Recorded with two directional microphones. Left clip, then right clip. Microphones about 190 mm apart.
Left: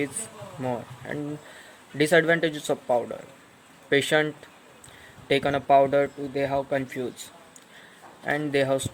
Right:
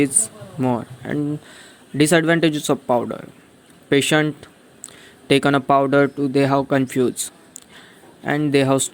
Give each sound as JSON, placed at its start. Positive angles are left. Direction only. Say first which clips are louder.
{"t": 0.6, "sound": "speech", "louder": "right 8 dB", "side_deg": -35}